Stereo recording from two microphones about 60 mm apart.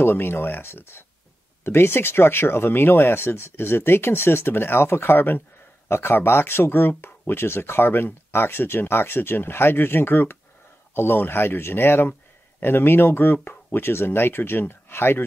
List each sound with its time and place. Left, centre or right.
0.0 s speech: left